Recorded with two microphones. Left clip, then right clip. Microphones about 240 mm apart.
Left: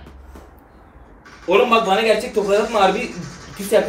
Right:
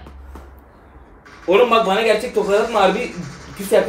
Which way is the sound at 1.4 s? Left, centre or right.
Centre.